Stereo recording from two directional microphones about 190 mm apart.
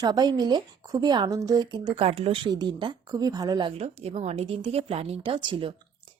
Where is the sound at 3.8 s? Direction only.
35° right (ahead or behind).